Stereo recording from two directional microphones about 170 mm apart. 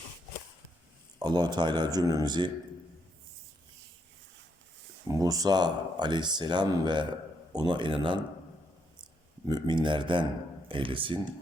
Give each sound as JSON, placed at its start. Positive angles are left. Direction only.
{"t": 1.2, "sound": "speech", "side_deg": -25}
{"t": 5.0, "sound": "speech", "side_deg": -20}
{"t": 9.5, "sound": "speech", "side_deg": -25}